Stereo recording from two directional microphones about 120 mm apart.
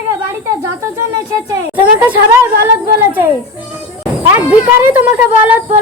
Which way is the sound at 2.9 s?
20° right (ahead or behind).